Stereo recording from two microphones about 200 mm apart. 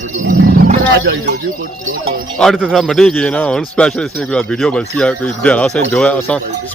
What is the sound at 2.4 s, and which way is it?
A man's voice, centre (ahead or behind).